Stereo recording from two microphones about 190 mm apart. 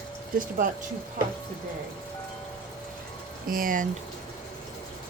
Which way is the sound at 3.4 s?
50° right (ahead or behind).